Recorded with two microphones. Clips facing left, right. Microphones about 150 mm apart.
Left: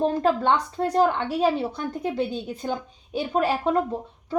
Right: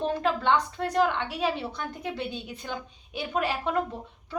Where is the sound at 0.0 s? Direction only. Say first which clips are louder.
Left 5 dB; 35° left (ahead or behind).